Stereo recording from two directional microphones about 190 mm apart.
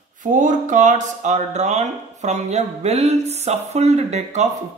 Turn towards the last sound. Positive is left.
turn(degrees=-35)  # may be behind; listen again after turning